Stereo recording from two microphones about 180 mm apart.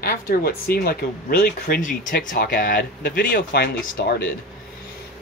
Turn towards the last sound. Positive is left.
turn(degrees=60)  # may be behind; listen again after turning